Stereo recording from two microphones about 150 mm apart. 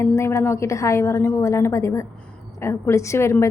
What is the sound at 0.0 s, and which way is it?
A woman's voice, 20° left (ahead or behind).